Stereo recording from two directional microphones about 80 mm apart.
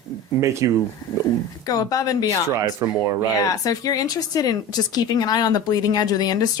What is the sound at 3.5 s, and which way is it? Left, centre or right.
Speech, left.